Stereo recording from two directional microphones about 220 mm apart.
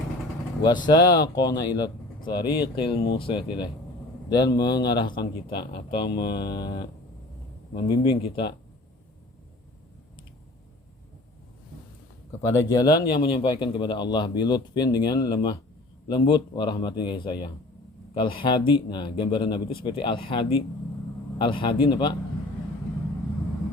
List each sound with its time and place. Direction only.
0.6 s speech: 20° left (ahead or behind)
12.5 s speech: 15° left (ahead or behind)